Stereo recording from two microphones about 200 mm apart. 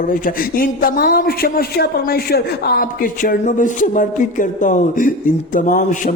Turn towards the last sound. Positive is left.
turn(degrees=40)  # may be behind; listen again after turning